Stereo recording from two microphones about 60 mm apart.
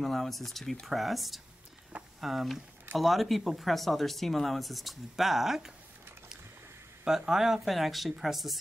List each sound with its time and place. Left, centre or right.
0.0 s speech: centre
7.1 s speech: centre